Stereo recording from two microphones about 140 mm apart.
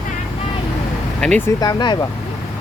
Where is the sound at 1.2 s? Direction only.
5° left (ahead or behind).